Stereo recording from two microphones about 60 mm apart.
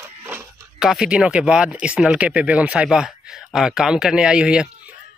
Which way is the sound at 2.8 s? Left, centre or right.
Centre.